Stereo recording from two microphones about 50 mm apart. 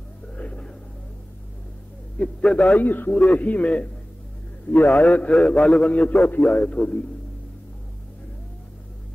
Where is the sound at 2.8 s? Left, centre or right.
Left.